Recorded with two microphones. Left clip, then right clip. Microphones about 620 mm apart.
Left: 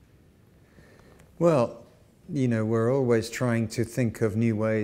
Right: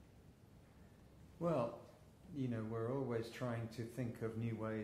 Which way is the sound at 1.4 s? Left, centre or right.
Left.